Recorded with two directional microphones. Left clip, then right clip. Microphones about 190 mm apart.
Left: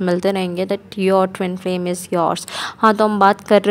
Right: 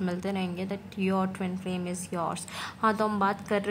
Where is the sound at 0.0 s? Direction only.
45° left (ahead or behind).